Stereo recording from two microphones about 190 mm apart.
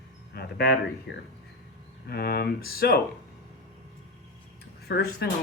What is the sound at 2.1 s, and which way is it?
Speech, 55° left (ahead or behind).